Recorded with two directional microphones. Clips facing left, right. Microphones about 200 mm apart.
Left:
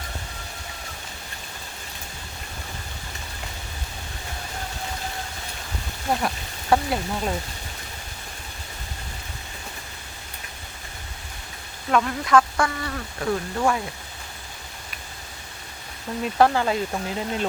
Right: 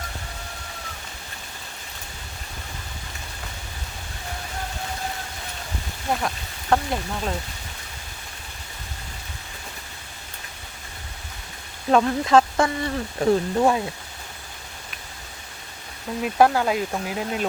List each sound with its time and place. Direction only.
6.2 s speech: 5° left (ahead or behind)
11.9 s speech: 30° right (ahead or behind)
16.2 s speech: 5° right (ahead or behind)